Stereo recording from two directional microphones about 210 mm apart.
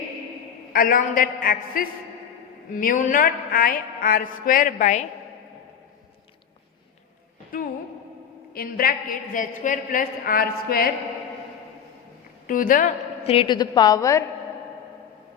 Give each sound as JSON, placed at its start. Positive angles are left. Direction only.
{"t": 0.7, "sound": "a woman's voice", "side_deg": 40}
{"t": 2.7, "sound": "a sound", "side_deg": 40}
{"t": 8.5, "sound": "a woman's voice", "side_deg": 45}
{"t": 12.5, "sound": "a woman's voice", "side_deg": 40}
{"t": 13.3, "sound": "a woman's voice", "side_deg": 25}